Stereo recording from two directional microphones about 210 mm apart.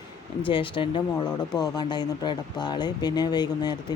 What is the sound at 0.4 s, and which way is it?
Speech, 25° left (ahead or behind).